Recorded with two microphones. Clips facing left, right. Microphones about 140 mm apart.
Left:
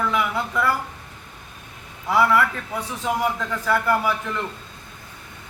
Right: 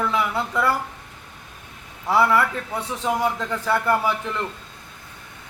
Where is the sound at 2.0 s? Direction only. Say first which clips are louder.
Even; 30° right (ahead or behind).